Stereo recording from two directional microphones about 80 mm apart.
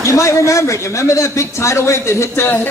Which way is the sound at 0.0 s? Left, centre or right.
Left.